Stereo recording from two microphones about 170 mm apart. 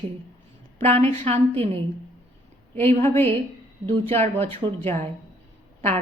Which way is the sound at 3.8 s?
35° right (ahead or behind).